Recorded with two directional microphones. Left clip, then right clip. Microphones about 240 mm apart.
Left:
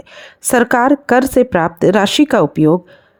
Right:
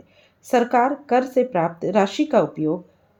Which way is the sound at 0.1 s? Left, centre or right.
Left.